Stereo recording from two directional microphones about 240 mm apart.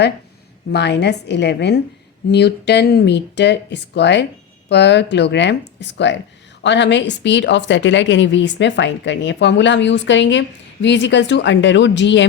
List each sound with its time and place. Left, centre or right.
0.7 s a woman's voice: left